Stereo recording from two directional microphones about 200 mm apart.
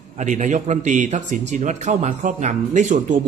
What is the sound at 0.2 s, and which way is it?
A man's voice, 40° right (ahead or behind).